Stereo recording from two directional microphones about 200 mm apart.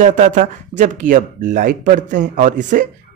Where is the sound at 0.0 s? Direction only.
40° right (ahead or behind).